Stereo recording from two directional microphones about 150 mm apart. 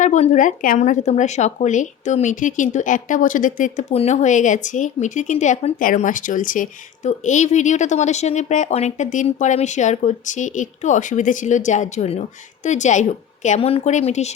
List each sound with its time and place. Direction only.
0.0 s a woman's voice: 55° left (ahead or behind)
13.6 s speech: 40° left (ahead or behind)